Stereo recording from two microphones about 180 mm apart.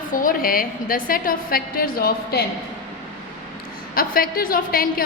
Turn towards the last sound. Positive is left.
turn(degrees=55)  # may be behind; listen again after turning